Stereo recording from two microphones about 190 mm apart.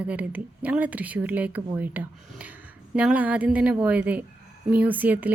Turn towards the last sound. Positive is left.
turn(degrees=-10)  # may be behind; listen again after turning